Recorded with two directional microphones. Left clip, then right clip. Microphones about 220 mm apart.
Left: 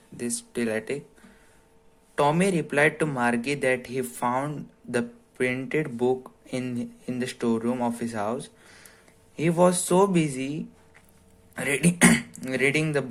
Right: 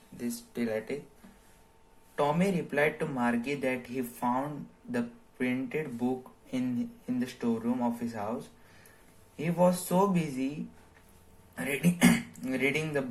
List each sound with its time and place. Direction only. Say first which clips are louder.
0.2 s speech: left 6 dB; 35° left (ahead or behind)
2.1 s speech: left 6 dB; 40° left (ahead or behind)
9.4 s speech: left 6 dB; 45° left (ahead or behind)
11.5 s speech: left 6 dB; 40° left (ahead or behind)